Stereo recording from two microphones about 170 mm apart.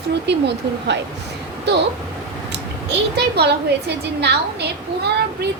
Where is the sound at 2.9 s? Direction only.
80° right.